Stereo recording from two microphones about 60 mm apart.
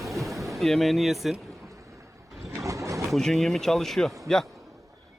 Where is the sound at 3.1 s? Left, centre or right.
Centre.